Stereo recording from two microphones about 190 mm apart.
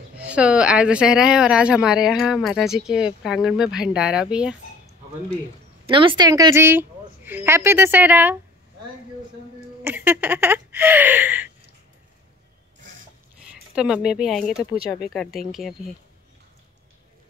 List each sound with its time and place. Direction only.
0.2 s speech: 5° right (ahead or behind)
5.9 s a woman's voice: 25° right (ahead or behind); by 8.4 s 10° right (ahead or behind)
9.8 s a woman's voice: 10° right (ahead or behind)
13.7 s speech: 5° right (ahead or behind)